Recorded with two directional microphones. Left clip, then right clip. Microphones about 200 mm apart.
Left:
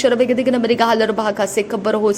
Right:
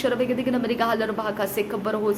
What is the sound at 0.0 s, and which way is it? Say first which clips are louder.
A woman's voice: left 9 dB; 35° left (ahead or behind).